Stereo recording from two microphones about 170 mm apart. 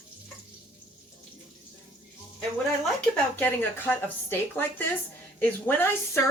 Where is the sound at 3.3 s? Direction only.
10° left (ahead or behind).